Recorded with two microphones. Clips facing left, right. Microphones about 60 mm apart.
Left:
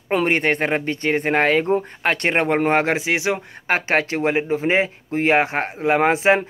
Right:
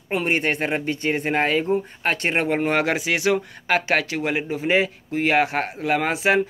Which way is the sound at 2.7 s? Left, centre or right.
Left.